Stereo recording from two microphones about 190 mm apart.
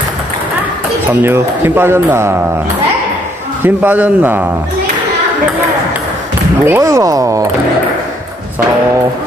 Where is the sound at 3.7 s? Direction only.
10° right (ahead or behind).